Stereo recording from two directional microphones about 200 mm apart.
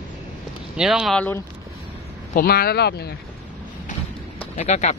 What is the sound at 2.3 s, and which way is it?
Speech, 50° left (ahead or behind).